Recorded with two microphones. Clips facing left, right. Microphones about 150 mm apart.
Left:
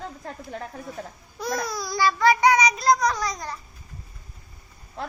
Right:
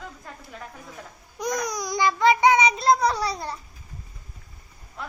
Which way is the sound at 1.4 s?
15° right (ahead or behind).